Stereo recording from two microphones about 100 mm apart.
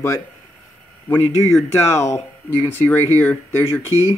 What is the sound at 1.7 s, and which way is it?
Speech, 25° left (ahead or behind).